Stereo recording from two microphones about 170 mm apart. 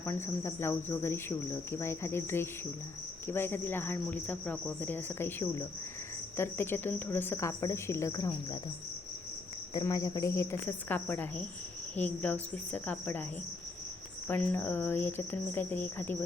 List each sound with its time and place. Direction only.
0.0 s cricket: 15° left (ahead or behind)
9.7 s cricket: 20° left (ahead or behind)
14.3 s cricket: 10° left (ahead or behind)